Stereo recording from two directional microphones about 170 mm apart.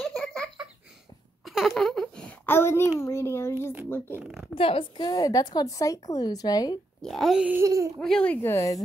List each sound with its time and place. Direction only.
0.0 s a sound: centre (ahead or behind)
4.2 s speech: centre (ahead or behind)
4.6 s a woman's voice: 30° left (ahead or behind)
7.0 s speech: centre (ahead or behind)
7.6 s speech: 20° right (ahead or behind)
8.0 s speech: 5° left (ahead or behind)